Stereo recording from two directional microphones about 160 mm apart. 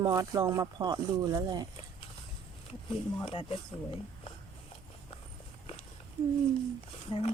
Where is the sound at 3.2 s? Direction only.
35° left (ahead or behind).